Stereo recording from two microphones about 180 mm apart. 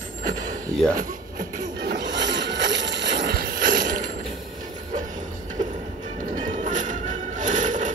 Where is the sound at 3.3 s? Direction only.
55° right (ahead or behind).